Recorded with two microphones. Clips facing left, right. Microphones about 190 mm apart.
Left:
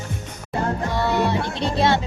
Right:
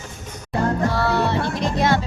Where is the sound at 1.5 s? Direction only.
30° left (ahead or behind).